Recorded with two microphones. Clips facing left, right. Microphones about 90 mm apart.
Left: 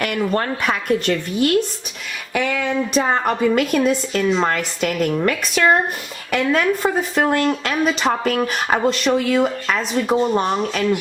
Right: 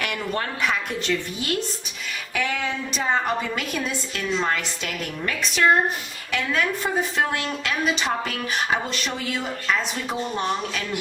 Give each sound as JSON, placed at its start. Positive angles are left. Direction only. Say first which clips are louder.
{"t": 0.0, "sound": "a woman's voice", "louder": "left 7 dB", "side_deg": 45}